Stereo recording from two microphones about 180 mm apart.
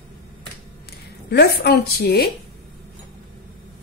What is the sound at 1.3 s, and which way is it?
Speech, 60° left (ahead or behind).